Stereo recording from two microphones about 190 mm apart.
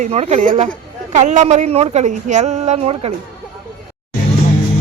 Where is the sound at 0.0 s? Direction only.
35° right (ahead or behind).